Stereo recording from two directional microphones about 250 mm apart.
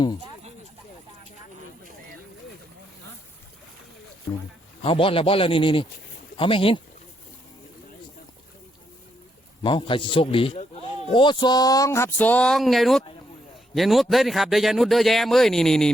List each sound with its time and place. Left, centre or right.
4.3 s speech: centre
4.8 s a man's voice: left
9.6 s a man's voice: centre